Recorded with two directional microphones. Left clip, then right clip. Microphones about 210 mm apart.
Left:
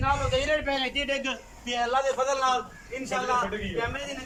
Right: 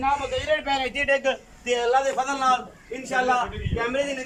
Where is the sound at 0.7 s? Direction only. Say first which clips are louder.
Right 5 dB; 40° right (ahead or behind).